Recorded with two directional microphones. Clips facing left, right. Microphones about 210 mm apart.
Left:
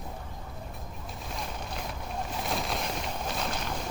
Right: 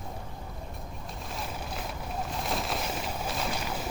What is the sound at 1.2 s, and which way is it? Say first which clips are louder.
Boat: even; centre (ahead or behind).